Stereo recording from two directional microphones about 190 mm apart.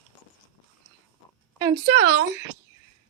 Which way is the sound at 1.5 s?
20° right (ahead or behind).